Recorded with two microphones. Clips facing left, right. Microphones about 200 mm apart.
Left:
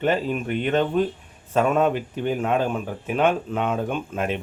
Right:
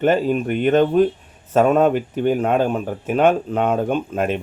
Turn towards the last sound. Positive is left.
turn(degrees=-45)  # may be behind; listen again after turning